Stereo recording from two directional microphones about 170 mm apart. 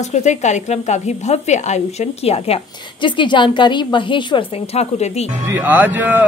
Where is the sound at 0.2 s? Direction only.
45° left (ahead or behind).